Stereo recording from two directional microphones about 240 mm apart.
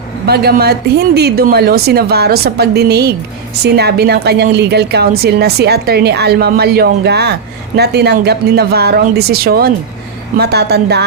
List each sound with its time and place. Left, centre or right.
0.3 s a woman's voice: right